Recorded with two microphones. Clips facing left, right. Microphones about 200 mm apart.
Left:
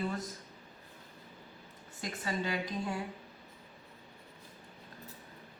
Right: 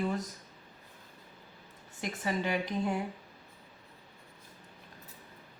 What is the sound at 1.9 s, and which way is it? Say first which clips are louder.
Speech: right 3 dB; 20° right (ahead or behind).